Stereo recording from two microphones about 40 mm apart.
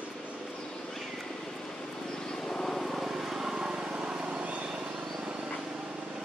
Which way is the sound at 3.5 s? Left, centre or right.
Right.